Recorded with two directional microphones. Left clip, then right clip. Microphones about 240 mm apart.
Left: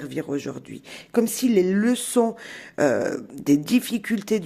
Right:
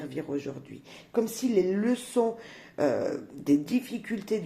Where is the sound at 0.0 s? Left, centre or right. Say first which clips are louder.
Left 5 dB; left.